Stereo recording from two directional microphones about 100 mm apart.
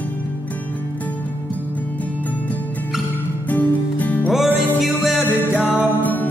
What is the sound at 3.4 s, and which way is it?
Music, 15° left (ahead or behind).